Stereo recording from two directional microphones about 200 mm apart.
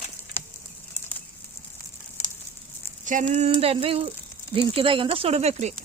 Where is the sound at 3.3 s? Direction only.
30° right (ahead or behind).